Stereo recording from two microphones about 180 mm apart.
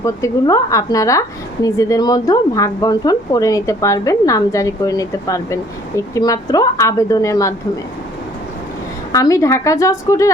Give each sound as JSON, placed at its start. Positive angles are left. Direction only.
{"t": 0.0, "sound": "speech", "side_deg": 20}
{"t": 9.1, "sound": "speech", "side_deg": 20}